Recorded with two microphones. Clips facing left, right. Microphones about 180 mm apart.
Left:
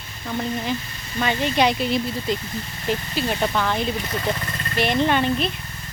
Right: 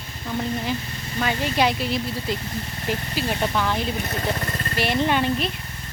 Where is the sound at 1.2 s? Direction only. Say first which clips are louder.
Left 2 dB; 5° right (ahead or behind).